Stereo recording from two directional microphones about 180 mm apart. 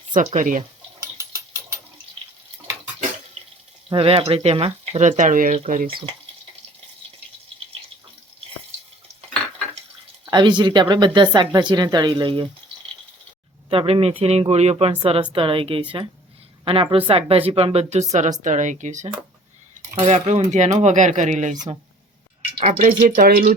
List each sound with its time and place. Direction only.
0.1 s speech: 45° right (ahead or behind)
1.2 s mechanisms: 15° right (ahead or behind)
3.8 s speech: 30° right (ahead or behind); by 6.0 s 50° right (ahead or behind)
10.2 s speech: 25° right (ahead or behind)
13.7 s speech: 30° right (ahead or behind); by 23.5 s 55° right (ahead or behind)